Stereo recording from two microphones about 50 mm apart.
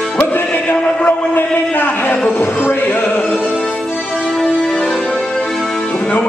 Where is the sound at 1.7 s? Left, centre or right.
Left.